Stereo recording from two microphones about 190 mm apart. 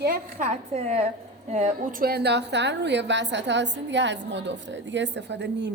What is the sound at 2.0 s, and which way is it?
A woman's voice, 60° right (ahead or behind).